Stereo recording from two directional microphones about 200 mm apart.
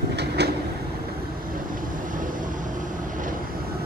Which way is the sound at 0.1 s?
55° right (ahead or behind).